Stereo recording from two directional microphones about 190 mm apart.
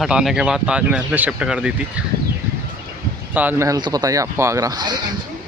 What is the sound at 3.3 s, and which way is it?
Speech, 10° right (ahead or behind).